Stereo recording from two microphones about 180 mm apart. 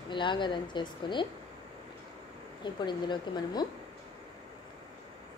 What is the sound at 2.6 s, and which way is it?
Speech, 25° left (ahead or behind).